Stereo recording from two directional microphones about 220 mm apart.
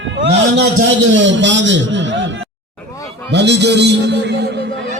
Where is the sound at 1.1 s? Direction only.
55° right (ahead or behind).